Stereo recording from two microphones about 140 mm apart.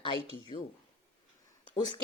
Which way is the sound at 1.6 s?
35° left (ahead or behind).